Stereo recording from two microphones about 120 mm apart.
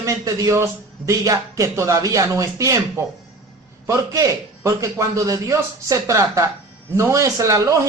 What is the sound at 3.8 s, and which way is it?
Speech, 25° right (ahead or behind).